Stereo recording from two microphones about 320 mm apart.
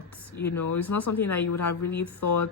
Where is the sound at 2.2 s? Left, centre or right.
Left.